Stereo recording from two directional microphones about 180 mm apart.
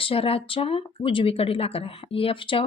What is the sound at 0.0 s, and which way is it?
Speech, 30° left (ahead or behind).